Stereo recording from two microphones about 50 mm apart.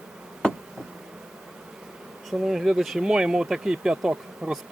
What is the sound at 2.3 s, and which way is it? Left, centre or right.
Speech, centre.